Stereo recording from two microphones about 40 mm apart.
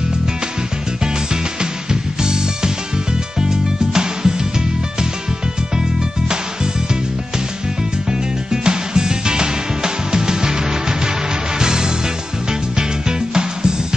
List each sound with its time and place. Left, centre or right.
1.3 s music: centre
8.5 s music: centre
13.3 s music: centre